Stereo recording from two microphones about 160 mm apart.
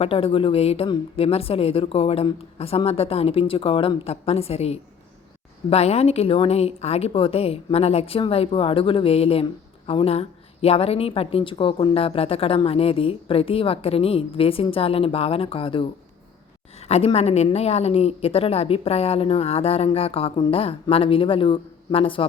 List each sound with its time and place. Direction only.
0.0 s a woman's voice: 35° left (ahead or behind)